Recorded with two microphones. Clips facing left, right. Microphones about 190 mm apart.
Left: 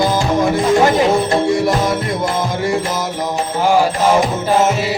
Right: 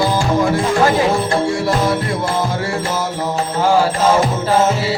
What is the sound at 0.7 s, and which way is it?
Music, 20° left (ahead or behind).